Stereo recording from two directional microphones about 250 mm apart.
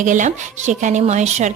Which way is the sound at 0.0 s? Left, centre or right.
Right.